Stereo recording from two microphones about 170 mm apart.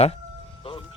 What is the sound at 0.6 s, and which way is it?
Music, 35° left (ahead or behind).